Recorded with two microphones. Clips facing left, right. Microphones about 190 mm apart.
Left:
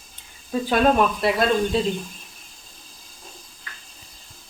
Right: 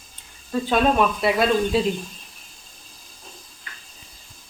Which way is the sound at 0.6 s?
Centre (ahead or behind).